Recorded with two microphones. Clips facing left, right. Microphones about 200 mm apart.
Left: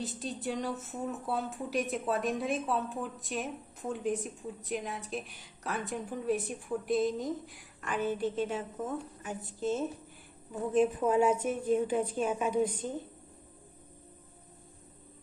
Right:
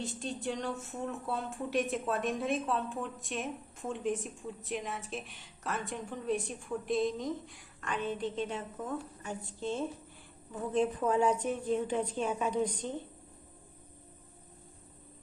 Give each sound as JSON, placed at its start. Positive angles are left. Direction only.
{"t": 0.2, "sound": "a woman's voice", "side_deg": 0}
{"t": 8.8, "sound": "a woman's voice", "side_deg": 20}
{"t": 9.6, "sound": "a woman's voice", "side_deg": 5}